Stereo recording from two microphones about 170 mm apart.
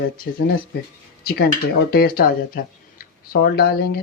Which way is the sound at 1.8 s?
65° left (ahead or behind).